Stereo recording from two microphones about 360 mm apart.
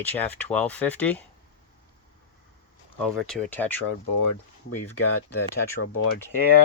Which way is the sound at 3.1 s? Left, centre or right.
Centre.